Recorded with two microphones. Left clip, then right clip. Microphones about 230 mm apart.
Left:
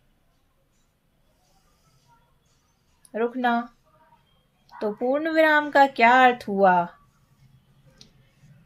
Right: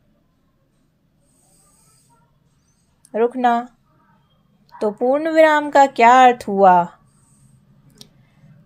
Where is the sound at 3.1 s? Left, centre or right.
Right.